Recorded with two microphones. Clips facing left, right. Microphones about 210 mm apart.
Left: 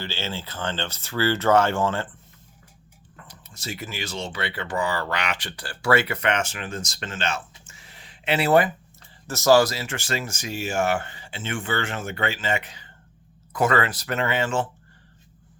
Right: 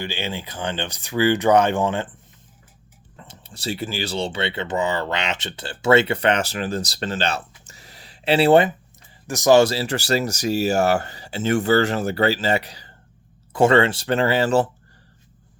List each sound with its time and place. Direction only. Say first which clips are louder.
0.0 s speech: right 3 dB; 15° right (ahead or behind)
3.2 s speech: right 4 dB; 30° right (ahead or behind)